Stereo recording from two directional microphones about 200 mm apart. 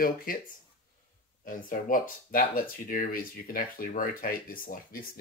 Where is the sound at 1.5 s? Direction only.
40° left (ahead or behind).